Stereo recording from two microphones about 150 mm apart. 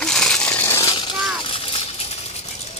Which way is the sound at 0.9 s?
35° left (ahead or behind).